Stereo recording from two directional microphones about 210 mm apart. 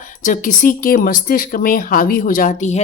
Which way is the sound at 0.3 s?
40° left (ahead or behind).